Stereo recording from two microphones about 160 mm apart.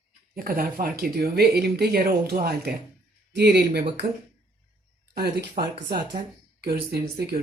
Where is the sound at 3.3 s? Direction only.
90° right.